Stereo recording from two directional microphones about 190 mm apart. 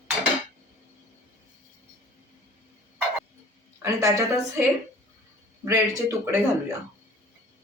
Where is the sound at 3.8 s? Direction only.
15° right (ahead or behind).